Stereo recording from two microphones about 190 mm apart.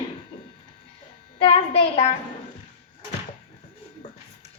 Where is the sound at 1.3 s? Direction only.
30° left (ahead or behind).